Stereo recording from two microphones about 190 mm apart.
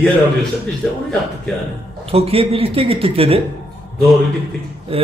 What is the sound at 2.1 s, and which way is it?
A man's voice, 30° right (ahead or behind).